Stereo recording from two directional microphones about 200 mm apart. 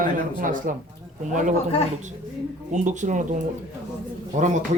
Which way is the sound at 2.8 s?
40° right (ahead or behind).